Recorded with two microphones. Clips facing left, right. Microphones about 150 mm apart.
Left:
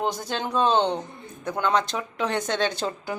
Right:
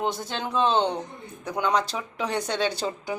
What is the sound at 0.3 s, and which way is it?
Speech, centre (ahead or behind).